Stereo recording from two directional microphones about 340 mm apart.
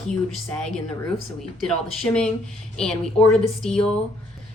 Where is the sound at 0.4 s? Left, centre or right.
Centre.